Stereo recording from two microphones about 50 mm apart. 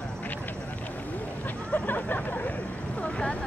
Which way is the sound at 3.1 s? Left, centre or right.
Centre.